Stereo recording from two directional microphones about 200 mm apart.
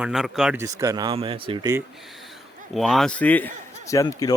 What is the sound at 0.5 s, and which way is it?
Speech, 15° right (ahead or behind).